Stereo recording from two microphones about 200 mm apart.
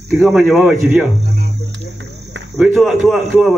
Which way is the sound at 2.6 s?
5° right (ahead or behind).